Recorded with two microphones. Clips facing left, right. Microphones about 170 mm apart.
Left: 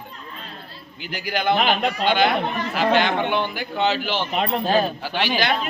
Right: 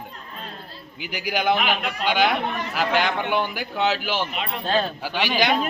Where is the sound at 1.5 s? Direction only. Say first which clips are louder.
Left 4 dB; 35° left (ahead or behind).